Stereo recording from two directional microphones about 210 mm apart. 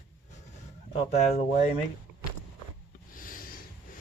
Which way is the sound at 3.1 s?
40° left (ahead or behind).